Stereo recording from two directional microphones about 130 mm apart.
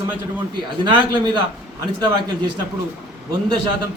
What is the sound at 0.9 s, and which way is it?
A man's voice, 35° right (ahead or behind).